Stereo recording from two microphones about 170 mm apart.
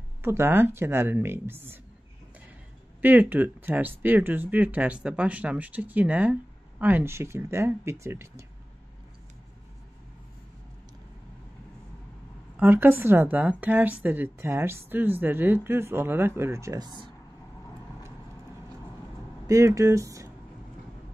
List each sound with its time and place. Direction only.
0.2 s a woman's voice: 15° right (ahead or behind)
3.0 s a woman's voice: 10° right (ahead or behind)
12.5 s a woman's voice: 10° right (ahead or behind)
19.4 s speech: 20° right (ahead or behind)